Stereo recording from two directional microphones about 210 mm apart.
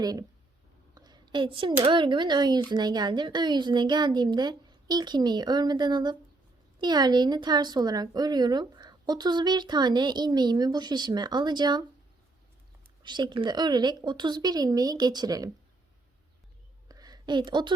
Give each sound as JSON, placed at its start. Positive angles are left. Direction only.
{"t": 0.0, "sound": "speech", "side_deg": -20}
{"t": 13.0, "sound": "speech", "side_deg": -20}
{"t": 16.9, "sound": "a sound", "side_deg": -20}